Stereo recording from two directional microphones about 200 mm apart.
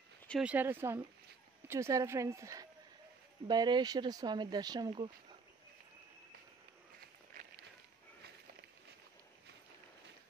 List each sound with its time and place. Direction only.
0.3 s a woman's voice: 5° right (ahead or behind); by 5.1 s 20° right (ahead or behind)